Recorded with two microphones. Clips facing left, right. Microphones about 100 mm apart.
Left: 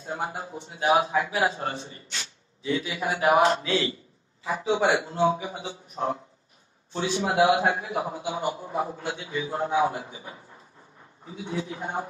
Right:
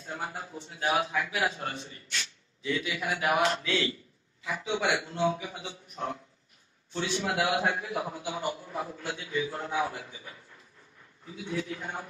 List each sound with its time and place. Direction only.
0.0 s a man's voice: 30° left (ahead or behind)